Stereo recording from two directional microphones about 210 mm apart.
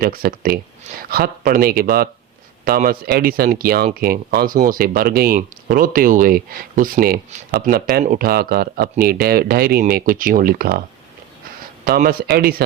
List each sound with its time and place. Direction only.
0.0 s speech: 45° right (ahead or behind)
11.9 s speech: 45° right (ahead or behind)